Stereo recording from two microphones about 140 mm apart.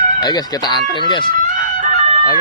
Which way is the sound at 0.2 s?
30° left (ahead or behind).